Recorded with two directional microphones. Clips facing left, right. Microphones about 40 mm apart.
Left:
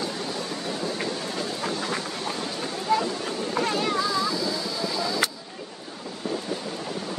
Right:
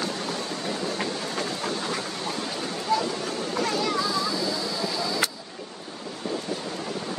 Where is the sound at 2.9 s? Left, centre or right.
Left.